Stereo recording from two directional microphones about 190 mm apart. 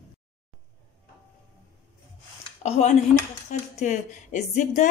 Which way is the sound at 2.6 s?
35° left (ahead or behind).